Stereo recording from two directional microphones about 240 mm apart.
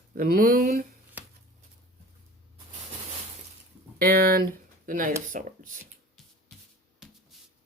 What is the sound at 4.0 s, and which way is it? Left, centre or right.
Speech, right.